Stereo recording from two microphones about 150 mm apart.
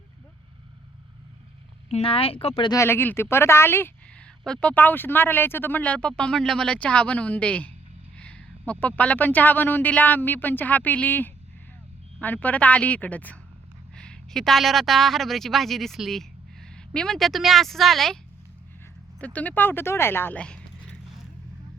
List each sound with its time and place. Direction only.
1.9 s speech: 40° left (ahead or behind)
2.6 s a man's voice: 20° left (ahead or behind); by 18.2 s centre (ahead or behind)
19.2 s speech: 10° left (ahead or behind)